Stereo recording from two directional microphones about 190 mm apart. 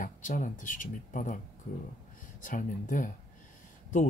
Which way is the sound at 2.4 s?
45° left (ahead or behind).